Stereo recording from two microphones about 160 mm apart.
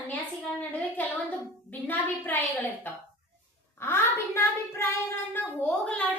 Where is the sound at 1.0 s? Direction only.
10° left (ahead or behind).